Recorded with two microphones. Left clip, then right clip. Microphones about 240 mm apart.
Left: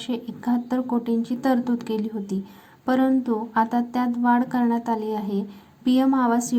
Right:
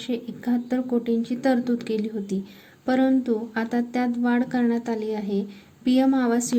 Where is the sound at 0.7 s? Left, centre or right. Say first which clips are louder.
Even; centre.